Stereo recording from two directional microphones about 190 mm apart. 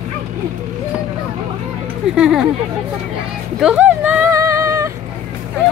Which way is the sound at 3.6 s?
5° right (ahead or behind).